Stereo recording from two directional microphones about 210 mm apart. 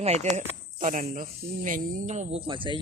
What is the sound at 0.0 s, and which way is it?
Speech, 30° right (ahead or behind).